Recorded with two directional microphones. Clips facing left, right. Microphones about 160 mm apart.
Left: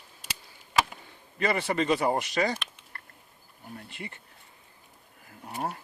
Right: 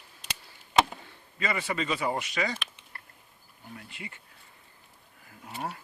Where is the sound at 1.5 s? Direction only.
35° left (ahead or behind).